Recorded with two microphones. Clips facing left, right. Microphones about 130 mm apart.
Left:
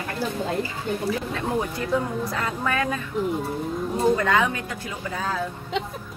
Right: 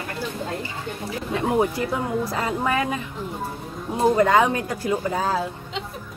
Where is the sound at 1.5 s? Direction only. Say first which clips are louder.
Right 1 dB; 25° right (ahead or behind).